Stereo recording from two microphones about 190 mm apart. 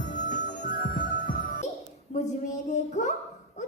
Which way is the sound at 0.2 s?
40° left (ahead or behind).